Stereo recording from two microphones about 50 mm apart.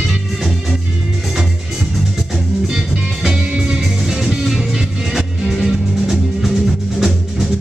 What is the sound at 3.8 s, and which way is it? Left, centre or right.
Music, centre.